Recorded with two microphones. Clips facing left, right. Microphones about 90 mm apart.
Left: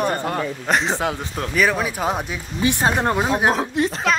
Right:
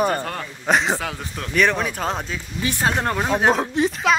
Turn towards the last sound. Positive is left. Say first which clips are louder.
# right 1 dB
turn(degrees=0)  # may be behind; listen again after turning